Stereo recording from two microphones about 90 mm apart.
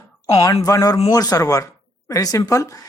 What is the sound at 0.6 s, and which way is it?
Speech, 40° left (ahead or behind).